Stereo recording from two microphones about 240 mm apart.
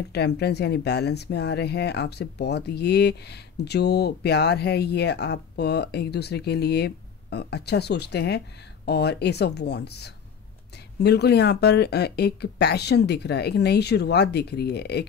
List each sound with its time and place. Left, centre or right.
0.1 s speech: left